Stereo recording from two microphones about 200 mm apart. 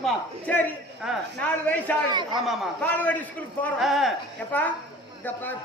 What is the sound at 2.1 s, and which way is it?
Speech, 20° right (ahead or behind).